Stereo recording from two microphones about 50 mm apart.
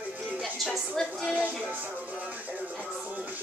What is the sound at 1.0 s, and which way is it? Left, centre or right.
Speech, centre.